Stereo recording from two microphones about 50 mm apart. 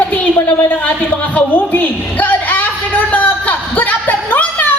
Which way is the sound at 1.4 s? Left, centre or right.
Left.